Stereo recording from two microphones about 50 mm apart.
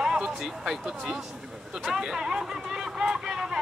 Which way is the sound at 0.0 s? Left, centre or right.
Centre.